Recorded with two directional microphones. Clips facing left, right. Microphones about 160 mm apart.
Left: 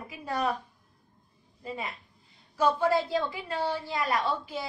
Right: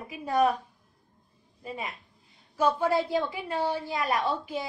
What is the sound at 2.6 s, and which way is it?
A woman's voice, 15° right (ahead or behind).